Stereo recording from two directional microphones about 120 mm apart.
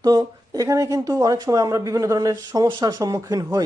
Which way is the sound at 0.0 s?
35° right (ahead or behind).